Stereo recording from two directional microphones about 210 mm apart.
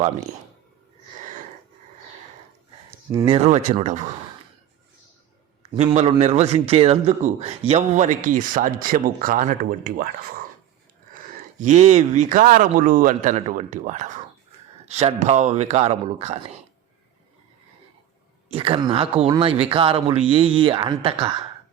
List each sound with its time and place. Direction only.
3.1 s speech: 20° right (ahead or behind)
5.7 s speech: 30° right (ahead or behind)
11.6 s speech: 35° right (ahead or behind)
18.4 s speech: 25° right (ahead or behind)